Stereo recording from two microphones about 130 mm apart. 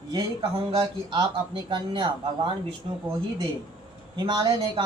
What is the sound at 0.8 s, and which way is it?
Speech, 30° right (ahead or behind).